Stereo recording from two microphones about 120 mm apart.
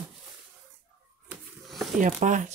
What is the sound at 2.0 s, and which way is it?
Speech, 90° right.